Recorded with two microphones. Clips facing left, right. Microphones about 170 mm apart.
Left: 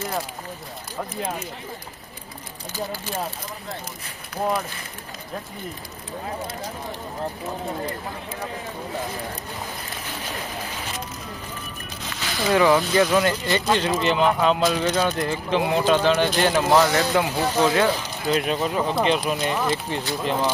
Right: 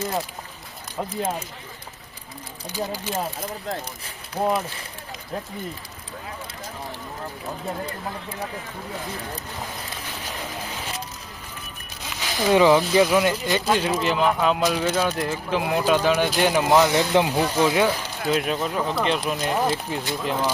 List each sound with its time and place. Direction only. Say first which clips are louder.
2.7 s speech: right 2 dB; 15° right (ahead or behind)
4.4 s speech: right 2 dB; 25° right (ahead or behind)
12.4 s speech: right 2 dB; 15° right (ahead or behind)